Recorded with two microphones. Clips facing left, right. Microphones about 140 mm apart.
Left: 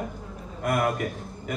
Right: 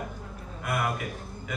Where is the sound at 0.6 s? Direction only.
45° left (ahead or behind).